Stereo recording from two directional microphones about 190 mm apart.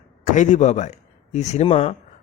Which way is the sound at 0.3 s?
40° left (ahead or behind).